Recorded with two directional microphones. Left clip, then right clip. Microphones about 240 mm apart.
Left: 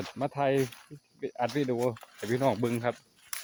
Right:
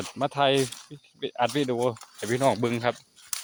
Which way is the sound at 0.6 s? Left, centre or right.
Right.